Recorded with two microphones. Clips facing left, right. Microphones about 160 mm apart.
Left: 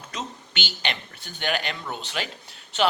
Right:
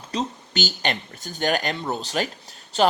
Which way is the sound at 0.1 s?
35° right (ahead or behind).